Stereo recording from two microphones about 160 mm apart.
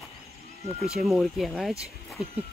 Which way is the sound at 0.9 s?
Centre (ahead or behind).